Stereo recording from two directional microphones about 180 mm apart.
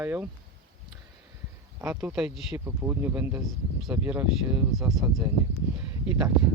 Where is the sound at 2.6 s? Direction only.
15° right (ahead or behind).